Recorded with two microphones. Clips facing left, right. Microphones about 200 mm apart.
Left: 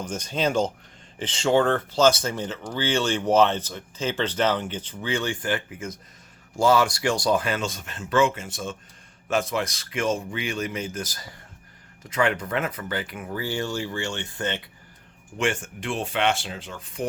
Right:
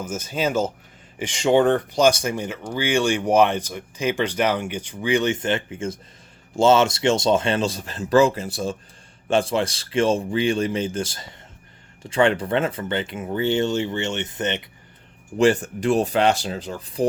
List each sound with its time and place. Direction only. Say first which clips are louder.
0.0 s speech: right 1 dB; 5° right (ahead or behind)
15.4 s speech: right 9 dB; 35° right (ahead or behind)